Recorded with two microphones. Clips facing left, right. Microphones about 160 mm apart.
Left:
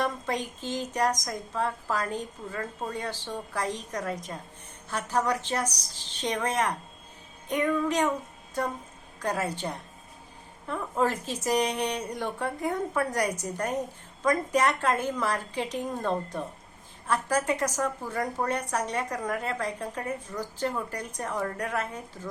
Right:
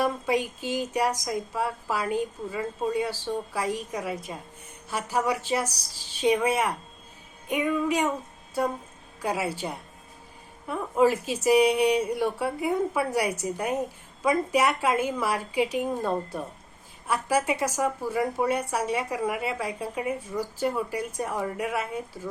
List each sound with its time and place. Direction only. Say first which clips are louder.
0.0 s a woman's voice: right 4 dB; 10° right (ahead or behind)